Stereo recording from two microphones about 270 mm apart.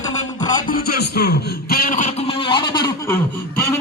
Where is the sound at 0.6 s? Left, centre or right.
Left.